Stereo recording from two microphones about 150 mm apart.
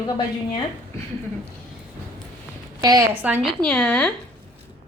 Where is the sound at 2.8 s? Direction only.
25° right (ahead or behind).